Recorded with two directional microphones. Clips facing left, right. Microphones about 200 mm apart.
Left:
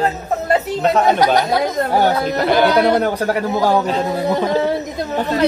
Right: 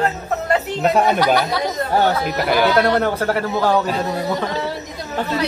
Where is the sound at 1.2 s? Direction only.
45° left (ahead or behind).